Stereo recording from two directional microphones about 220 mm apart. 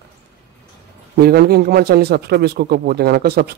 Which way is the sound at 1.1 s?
45° right (ahead or behind).